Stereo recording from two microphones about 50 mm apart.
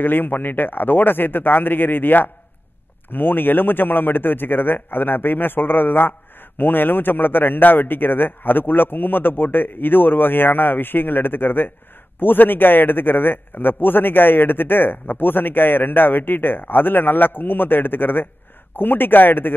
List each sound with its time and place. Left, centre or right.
0.0 s a man's voice: left